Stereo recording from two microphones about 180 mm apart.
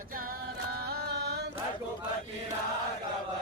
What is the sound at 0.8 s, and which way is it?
Music, 60° right (ahead or behind).